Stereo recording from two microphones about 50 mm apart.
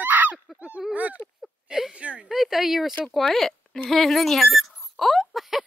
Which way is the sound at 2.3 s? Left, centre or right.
Centre.